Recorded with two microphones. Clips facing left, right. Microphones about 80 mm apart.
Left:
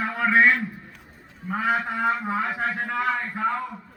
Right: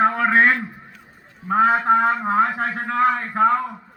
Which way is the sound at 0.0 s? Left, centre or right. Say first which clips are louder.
Right 4 dB; right.